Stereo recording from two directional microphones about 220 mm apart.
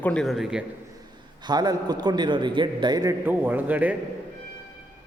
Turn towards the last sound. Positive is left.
turn(degrees=-5)  # may be behind; listen again after turning